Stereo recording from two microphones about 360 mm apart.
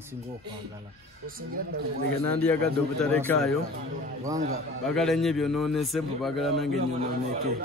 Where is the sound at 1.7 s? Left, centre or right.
Right.